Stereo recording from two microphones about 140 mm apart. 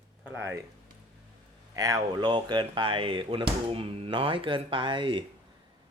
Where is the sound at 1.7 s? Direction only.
25° right (ahead or behind).